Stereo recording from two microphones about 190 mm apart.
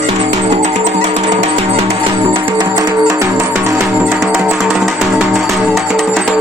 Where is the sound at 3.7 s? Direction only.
5° right (ahead or behind).